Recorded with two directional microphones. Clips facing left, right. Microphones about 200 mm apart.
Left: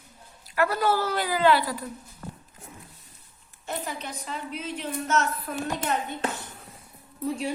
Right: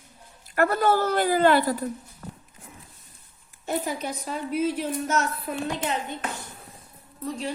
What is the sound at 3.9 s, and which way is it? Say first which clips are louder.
Speech: right 5 dB; 45° right (ahead or behind).